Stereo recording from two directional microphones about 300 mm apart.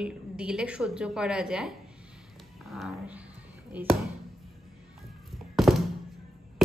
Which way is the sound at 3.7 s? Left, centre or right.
Centre.